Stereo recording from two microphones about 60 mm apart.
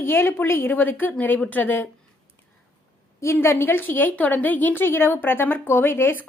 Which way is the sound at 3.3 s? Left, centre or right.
Left.